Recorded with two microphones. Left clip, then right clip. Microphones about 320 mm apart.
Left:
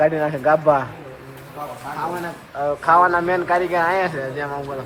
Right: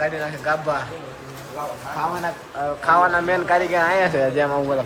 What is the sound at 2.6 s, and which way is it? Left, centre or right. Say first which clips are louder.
A man's voice: left 2 dB; centre.